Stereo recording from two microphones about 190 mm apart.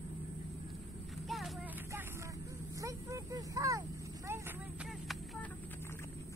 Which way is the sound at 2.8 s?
15° right (ahead or behind).